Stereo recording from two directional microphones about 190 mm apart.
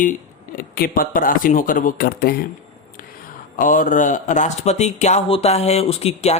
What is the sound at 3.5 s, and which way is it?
Speech, 45° left (ahead or behind).